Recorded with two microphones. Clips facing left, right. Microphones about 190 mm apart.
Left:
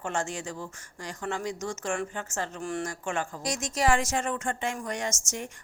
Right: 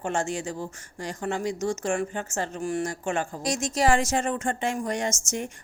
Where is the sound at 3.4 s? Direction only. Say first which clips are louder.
Right 3 dB; 30° right (ahead or behind).